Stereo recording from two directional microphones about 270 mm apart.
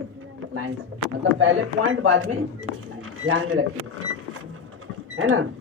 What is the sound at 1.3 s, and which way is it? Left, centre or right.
Speech, right.